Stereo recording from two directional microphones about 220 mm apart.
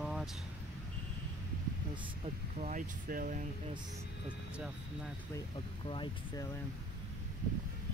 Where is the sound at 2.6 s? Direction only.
40° right (ahead or behind).